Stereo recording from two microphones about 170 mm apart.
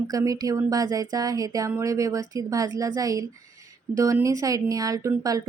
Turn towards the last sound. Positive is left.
turn(degrees=-20)  # may be behind; listen again after turning